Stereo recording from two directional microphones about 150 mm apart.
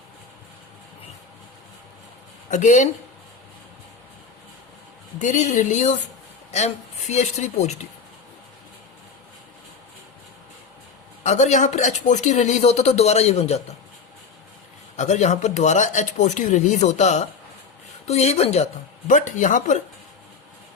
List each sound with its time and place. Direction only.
2.5 s speech: 55° left (ahead or behind)
5.2 s speech: 55° left (ahead or behind)
11.2 s speech: 50° left (ahead or behind)
14.9 s speech: 50° left (ahead or behind)